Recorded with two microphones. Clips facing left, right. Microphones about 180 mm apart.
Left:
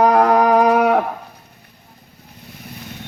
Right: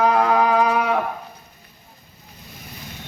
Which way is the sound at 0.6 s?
65° left (ahead or behind).